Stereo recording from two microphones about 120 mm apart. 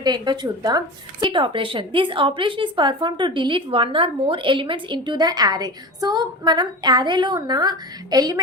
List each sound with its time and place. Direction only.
0.0 s a woman's voice: 35° right (ahead or behind)